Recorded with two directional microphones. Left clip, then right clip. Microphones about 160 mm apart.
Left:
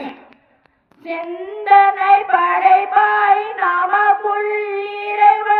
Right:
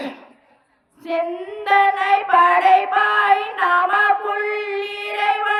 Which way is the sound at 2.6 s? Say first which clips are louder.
Left 2 dB; 5° left (ahead or behind).